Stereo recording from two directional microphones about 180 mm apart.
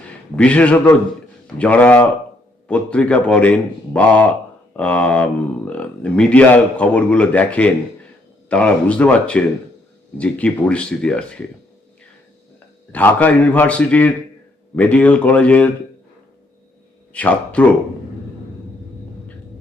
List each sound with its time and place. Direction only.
0.3 s speech: 5° left (ahead or behind)
12.9 s speech: 10° left (ahead or behind)
17.1 s speech: 10° left (ahead or behind)